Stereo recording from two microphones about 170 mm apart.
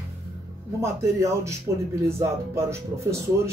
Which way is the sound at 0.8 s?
15° right (ahead or behind).